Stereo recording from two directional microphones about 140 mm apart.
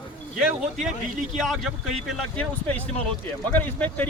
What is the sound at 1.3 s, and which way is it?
A man's voice, centre (ahead or behind).